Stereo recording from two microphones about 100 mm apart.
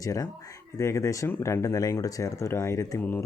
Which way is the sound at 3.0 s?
20° left (ahead or behind).